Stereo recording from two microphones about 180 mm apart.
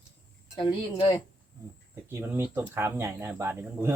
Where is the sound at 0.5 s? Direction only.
30° left (ahead or behind).